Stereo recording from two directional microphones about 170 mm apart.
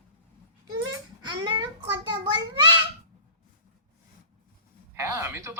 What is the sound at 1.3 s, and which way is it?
A child's voice, 30° right (ahead or behind).